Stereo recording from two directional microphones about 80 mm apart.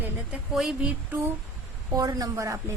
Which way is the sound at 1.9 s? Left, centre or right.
Right.